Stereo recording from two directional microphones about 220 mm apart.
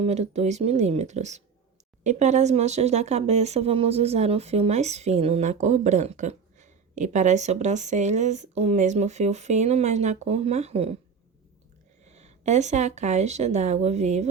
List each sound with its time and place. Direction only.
0.0 s speech: 30° right (ahead or behind)
12.0 s speech: 30° right (ahead or behind)